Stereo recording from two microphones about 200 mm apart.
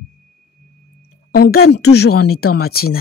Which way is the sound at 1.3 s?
50° left (ahead or behind).